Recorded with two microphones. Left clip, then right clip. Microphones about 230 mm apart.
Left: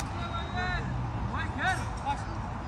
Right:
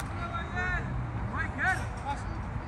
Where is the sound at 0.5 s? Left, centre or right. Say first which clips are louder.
Right 1 dB; left.